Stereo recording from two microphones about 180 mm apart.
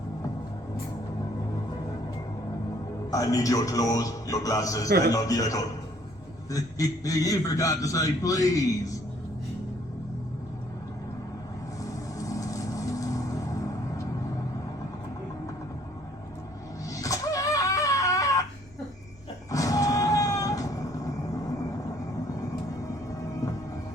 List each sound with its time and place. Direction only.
3.1 s a man's voice: 20° left (ahead or behind)
11.8 s vehicle: 20° left (ahead or behind)
16.9 s music: 20° left (ahead or behind)
19.5 s vehicle: 20° left (ahead or behind)